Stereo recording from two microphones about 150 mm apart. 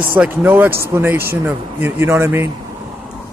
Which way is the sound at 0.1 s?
10° right (ahead or behind).